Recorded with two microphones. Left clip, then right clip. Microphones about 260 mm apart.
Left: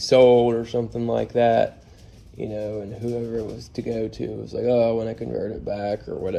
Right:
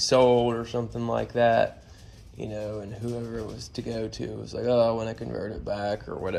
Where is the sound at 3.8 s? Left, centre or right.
Right.